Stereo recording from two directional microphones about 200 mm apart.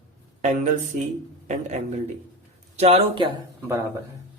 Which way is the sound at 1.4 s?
35° right (ahead or behind).